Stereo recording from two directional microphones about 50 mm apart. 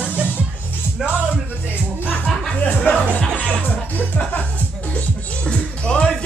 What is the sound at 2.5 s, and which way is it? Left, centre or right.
Music, left.